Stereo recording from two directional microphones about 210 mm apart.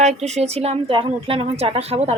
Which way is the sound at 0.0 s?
30° right (ahead or behind).